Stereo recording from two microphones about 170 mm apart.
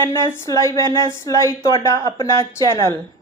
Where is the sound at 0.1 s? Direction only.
20° left (ahead or behind).